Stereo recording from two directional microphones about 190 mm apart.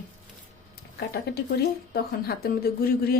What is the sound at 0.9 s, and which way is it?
Speech, 60° left (ahead or behind).